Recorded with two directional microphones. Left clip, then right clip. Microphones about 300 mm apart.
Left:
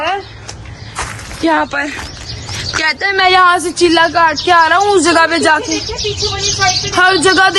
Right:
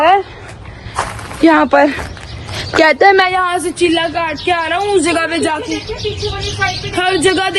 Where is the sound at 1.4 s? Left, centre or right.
Centre.